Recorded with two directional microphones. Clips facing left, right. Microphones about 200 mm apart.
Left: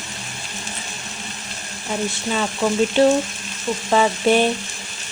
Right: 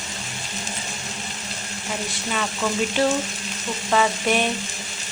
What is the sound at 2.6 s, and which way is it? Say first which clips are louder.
Speech: left 5 dB; 30° left (ahead or behind).